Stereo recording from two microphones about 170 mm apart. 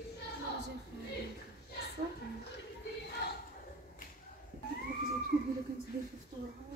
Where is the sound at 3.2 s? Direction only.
75° left (ahead or behind).